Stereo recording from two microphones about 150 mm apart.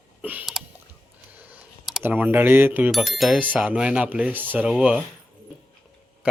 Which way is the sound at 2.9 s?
Centre (ahead or behind).